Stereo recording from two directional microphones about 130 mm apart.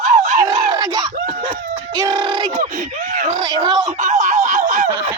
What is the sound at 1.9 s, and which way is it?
Speech, 30° right (ahead or behind).